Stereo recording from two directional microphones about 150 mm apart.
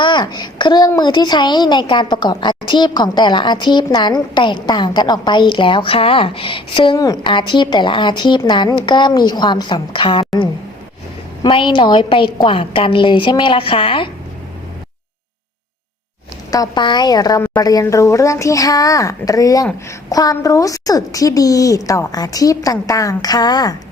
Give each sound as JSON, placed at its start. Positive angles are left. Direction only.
{"t": 0.0, "sound": "a woman's voice", "side_deg": 30}
{"t": 16.5, "sound": "a woman's voice", "side_deg": 25}